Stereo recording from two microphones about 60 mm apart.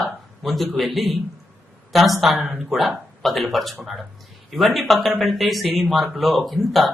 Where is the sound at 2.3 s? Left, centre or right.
Right.